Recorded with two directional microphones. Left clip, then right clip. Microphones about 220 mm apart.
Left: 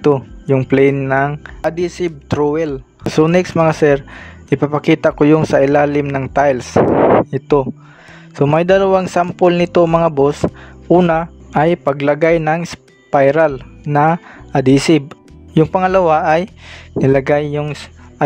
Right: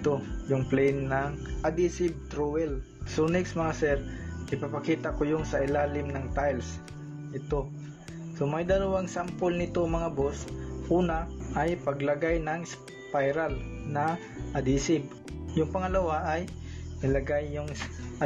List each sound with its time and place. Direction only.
0.0 s a man's voice: 45° left (ahead or behind)